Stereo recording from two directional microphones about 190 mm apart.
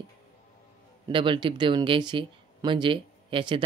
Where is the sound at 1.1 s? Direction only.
25° right (ahead or behind).